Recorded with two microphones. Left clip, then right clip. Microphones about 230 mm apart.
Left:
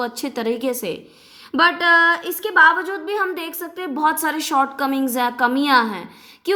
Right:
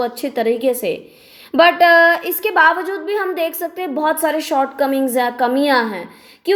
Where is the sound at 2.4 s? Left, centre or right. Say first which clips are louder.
Even; centre.